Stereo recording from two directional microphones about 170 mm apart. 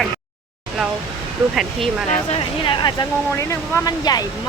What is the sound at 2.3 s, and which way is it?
Speech, 30° left (ahead or behind).